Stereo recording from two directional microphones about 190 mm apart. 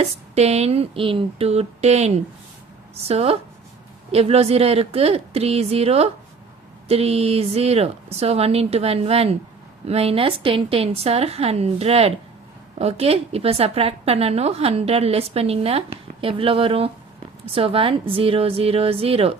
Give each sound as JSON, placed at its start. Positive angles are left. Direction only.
{"t": 0.0, "sound": "a woman's voice", "side_deg": -35}